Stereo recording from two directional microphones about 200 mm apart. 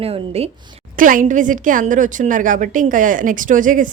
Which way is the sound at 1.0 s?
40° right (ahead or behind).